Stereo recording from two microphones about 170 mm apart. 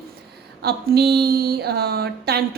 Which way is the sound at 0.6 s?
65° right (ahead or behind).